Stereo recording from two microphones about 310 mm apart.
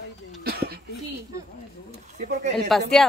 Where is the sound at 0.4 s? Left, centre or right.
Right.